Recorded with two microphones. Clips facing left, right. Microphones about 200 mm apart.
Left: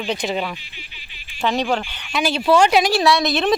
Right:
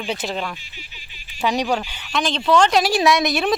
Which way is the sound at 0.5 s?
45° right (ahead or behind).